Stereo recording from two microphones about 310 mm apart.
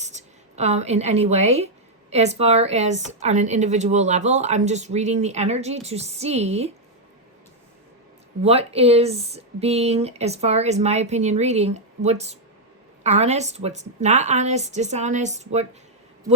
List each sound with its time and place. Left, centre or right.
0.0 s a woman's voice: right
8.4 s speech: centre